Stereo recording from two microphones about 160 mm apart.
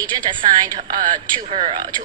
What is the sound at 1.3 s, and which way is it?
Speech, 35° right (ahead or behind).